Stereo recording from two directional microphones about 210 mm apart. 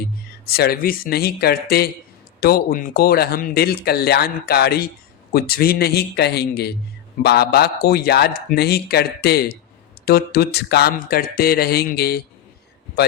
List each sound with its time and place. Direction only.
0.4 s speech: 45° left (ahead or behind)